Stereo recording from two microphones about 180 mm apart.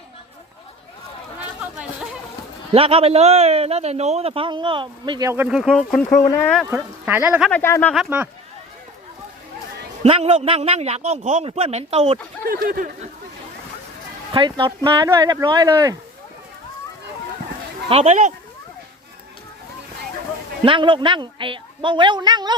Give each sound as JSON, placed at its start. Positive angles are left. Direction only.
{"t": 1.7, "sound": "chatter", "side_deg": -5}
{"t": 2.7, "sound": "a man's voice", "side_deg": -30}
{"t": 5.3, "sound": "speech", "side_deg": -10}
{"t": 6.7, "sound": "speech", "side_deg": -10}
{"t": 7.5, "sound": "speech", "side_deg": 10}
{"t": 7.9, "sound": "speech", "side_deg": -10}
{"t": 10.0, "sound": "a man's voice", "side_deg": -35}
{"t": 12.5, "sound": "speech", "side_deg": -50}
{"t": 14.3, "sound": "speech", "side_deg": -25}
{"t": 17.8, "sound": "a man's voice", "side_deg": -35}
{"t": 20.7, "sound": "speech", "side_deg": -30}